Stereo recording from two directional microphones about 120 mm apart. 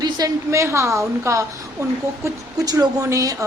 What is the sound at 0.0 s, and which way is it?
A woman's voice, 30° right (ahead or behind).